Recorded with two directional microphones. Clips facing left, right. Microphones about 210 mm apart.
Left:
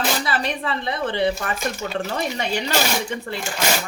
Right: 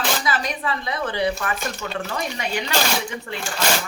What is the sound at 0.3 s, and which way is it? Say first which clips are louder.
Speech: left 1 dB; 30° left (ahead or behind).